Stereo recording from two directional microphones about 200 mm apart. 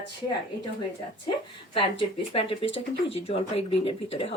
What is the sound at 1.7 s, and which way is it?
Speech, 25° left (ahead or behind).